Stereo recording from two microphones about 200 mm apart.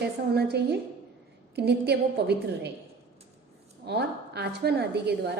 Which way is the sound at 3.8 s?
55° right (ahead or behind).